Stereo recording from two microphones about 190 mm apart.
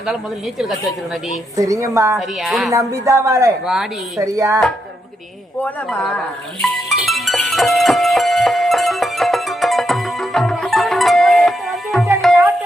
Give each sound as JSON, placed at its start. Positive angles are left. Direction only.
{"t": 1.5, "sound": "speech", "side_deg": -15}
{"t": 2.1, "sound": "a woman's voice", "side_deg": 0}
{"t": 2.7, "sound": "speech", "side_deg": -15}
{"t": 5.6, "sound": "a woman's voice", "side_deg": 5}
{"t": 6.6, "sound": "music", "side_deg": 0}